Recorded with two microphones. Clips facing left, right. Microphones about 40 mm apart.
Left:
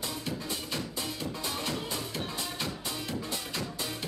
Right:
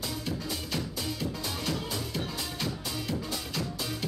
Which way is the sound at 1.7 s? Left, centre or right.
Centre.